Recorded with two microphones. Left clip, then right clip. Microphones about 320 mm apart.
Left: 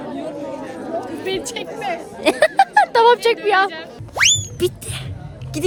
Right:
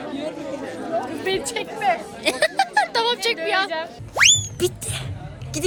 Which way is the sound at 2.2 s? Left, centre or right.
Centre.